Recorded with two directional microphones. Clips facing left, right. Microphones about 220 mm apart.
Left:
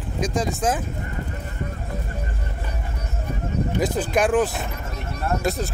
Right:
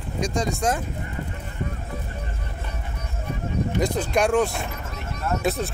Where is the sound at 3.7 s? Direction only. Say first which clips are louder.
Left 1 dB; 5° left (ahead or behind).